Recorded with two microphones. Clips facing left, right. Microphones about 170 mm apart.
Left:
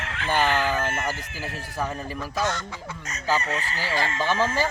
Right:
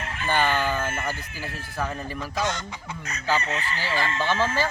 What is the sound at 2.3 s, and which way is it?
Chicken, 20° right (ahead or behind).